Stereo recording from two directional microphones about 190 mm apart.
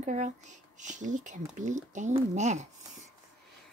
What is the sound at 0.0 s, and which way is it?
Speech, 40° right (ahead or behind).